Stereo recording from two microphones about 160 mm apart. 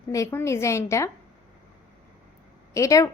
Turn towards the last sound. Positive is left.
turn(degrees=20)  # may be behind; listen again after turning